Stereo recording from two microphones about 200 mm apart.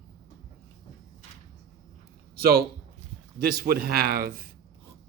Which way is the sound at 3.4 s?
50° right (ahead or behind).